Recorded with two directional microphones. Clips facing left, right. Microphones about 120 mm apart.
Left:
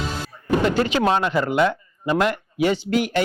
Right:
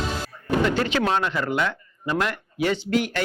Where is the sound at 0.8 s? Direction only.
20° left (ahead or behind).